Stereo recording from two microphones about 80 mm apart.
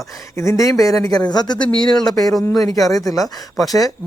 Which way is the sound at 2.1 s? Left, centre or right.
Left.